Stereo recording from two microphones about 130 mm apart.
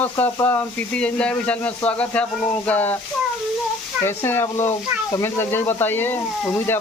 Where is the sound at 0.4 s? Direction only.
10° left (ahead or behind).